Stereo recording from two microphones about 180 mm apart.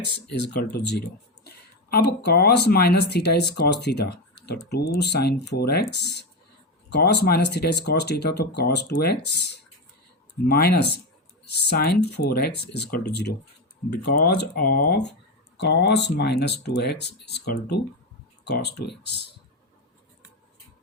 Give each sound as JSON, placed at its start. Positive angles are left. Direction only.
{"t": 0.0, "sound": "speech", "side_deg": 65}
{"t": 1.5, "sound": "a sound", "side_deg": 65}
{"t": 2.2, "sound": "speech", "side_deg": 65}